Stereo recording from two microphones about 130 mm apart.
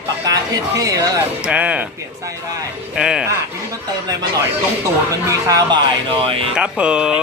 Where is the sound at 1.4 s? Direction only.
10° right (ahead or behind).